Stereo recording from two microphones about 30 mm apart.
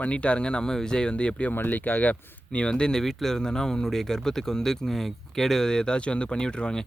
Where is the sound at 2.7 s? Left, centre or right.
Left.